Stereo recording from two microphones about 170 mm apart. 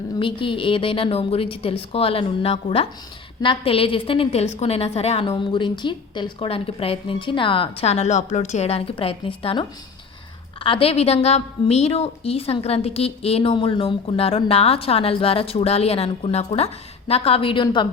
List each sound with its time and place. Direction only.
0.2 s a woman's voice: 30° left (ahead or behind)